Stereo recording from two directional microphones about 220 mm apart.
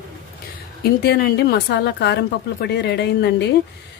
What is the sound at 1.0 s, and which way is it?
A woman's voice, 45° left (ahead or behind).